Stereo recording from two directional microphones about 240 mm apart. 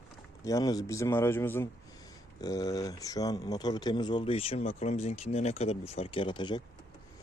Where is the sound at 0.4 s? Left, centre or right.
Centre.